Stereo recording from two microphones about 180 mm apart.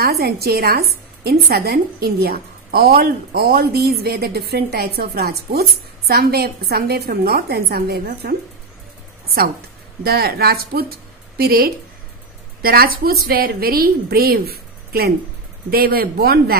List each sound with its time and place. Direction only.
0.0 s a woman's voice: 60° right (ahead or behind)
10.0 s a woman's voice: 60° right (ahead or behind)